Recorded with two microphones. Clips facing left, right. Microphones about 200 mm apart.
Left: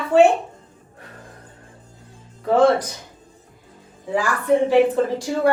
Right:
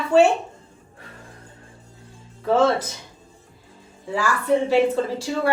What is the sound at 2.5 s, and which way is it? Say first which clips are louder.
Speech: left 3 dB; 15° left (ahead or behind).